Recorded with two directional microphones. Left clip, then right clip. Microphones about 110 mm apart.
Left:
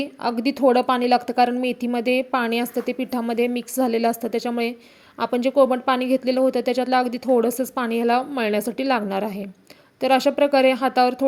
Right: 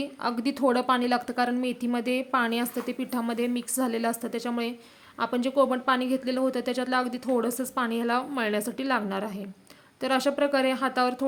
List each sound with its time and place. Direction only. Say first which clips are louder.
0.0 s a woman's voice: left 5 dB; 30° left (ahead or behind)